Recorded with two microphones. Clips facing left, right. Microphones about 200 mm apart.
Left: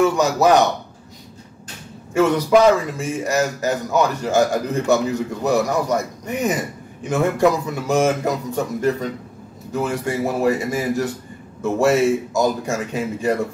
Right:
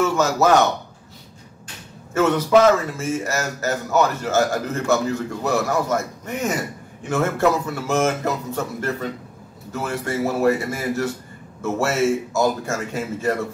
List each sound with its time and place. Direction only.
0.0 s a man's voice: 15° left (ahead or behind)
2.1 s a man's voice: 10° left (ahead or behind)